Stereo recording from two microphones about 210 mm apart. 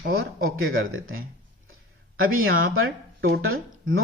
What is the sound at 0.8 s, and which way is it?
Speech, 70° right (ahead or behind).